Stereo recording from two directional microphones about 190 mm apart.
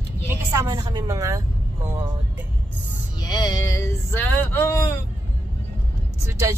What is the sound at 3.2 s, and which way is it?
Male singing, 20° left (ahead or behind).